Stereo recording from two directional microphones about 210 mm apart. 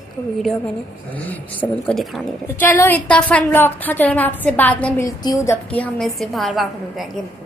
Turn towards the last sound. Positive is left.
turn(degrees=0)  # may be behind; listen again after turning